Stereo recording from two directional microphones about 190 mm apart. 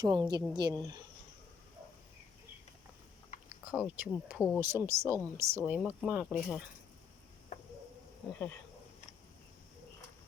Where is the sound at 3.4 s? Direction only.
5° right (ahead or behind).